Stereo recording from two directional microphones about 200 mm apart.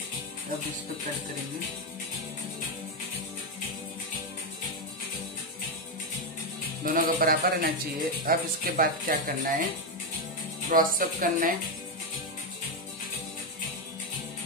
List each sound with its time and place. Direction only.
6.8 s speech: 45° right (ahead or behind)
10.7 s speech: 45° right (ahead or behind)